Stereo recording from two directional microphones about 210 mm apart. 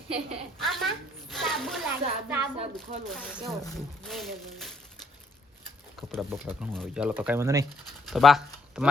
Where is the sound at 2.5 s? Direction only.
30° right (ahead or behind).